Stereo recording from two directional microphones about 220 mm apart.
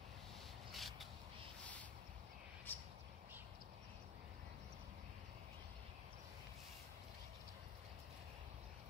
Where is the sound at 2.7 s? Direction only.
10° left (ahead or behind).